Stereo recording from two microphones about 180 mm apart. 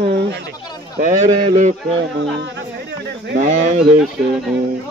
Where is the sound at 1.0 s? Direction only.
45° right (ahead or behind).